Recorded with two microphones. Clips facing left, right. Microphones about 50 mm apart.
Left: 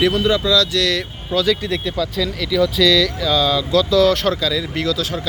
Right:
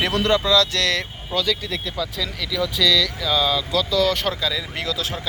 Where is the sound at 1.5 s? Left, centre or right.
Centre.